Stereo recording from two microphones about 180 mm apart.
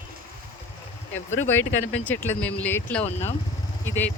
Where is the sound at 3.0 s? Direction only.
35° left (ahead or behind).